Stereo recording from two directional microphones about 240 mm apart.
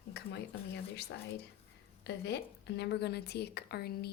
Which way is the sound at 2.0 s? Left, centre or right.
Left.